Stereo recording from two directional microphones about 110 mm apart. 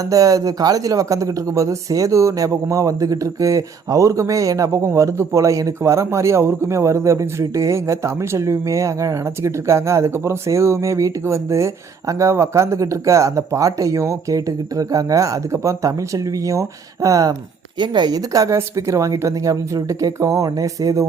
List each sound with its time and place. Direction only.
0.0 s speech: 30° right (ahead or behind)
17.7 s a woman's voice: 45° right (ahead or behind)